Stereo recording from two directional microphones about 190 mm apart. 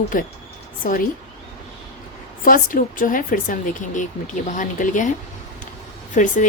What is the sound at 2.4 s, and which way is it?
A woman's voice, 45° left (ahead or behind).